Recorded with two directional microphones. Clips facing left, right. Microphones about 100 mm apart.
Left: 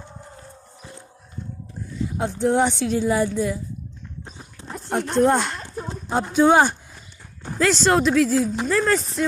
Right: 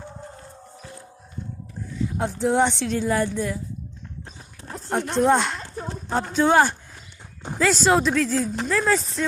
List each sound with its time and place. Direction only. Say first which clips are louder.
2.1 s speech: left 1 dB; centre (ahead or behind)
5.1 s speech: left 1 dB; centre (ahead or behind)
5.6 s clip-clop: left 1 dB; 15° left (ahead or behind)
7.6 s speech: left 1 dB; centre (ahead or behind)